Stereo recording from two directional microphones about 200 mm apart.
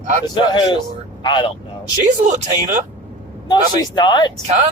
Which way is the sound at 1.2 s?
25° left (ahead or behind).